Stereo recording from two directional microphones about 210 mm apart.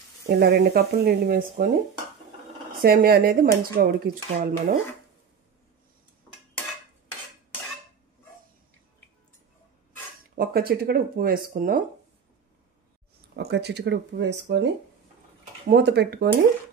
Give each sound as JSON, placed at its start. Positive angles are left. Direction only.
{"t": 0.3, "sound": "speech", "side_deg": -50}
{"t": 2.8, "sound": "speech", "side_deg": -45}
{"t": 10.3, "sound": "speech", "side_deg": -45}
{"t": 13.4, "sound": "speech", "side_deg": -50}
{"t": 15.7, "sound": "speech", "side_deg": -55}